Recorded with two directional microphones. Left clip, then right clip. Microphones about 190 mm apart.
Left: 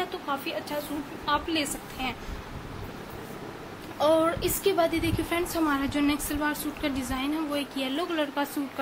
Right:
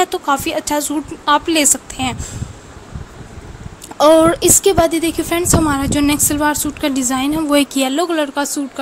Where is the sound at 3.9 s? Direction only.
50° right (ahead or behind).